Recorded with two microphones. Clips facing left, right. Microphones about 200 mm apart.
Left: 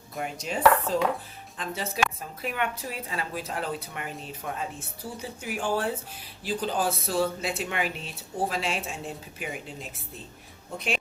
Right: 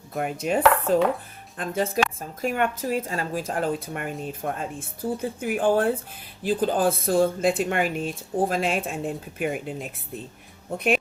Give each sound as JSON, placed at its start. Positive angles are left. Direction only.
{"t": 0.2, "sound": "chopping", "side_deg": -55}
{"t": 1.5, "sound": "speech", "side_deg": -50}